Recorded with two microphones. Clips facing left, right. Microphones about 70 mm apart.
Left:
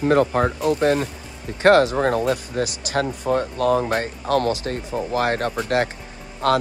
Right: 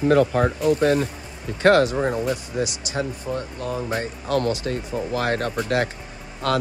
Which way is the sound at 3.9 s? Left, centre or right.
Left.